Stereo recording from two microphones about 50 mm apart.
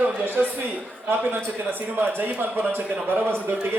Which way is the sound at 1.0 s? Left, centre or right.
Right.